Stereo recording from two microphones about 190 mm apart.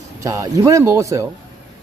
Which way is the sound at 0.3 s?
15° right (ahead or behind).